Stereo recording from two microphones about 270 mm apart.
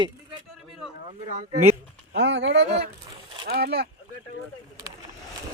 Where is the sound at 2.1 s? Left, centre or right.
Right.